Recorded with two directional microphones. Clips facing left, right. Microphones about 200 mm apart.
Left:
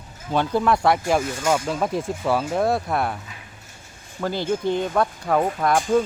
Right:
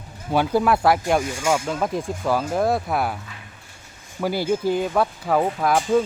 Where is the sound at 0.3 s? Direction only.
5° right (ahead or behind).